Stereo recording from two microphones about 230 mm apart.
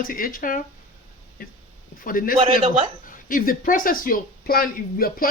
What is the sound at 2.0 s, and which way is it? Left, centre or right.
Speech, left.